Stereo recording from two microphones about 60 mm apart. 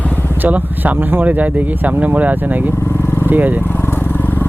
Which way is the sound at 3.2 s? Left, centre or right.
Right.